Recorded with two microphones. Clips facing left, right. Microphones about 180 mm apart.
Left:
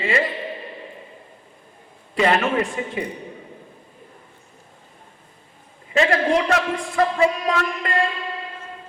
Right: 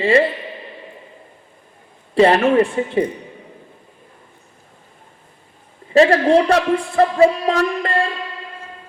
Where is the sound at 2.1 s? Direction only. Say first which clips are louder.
Right 7 dB; 30° right (ahead or behind).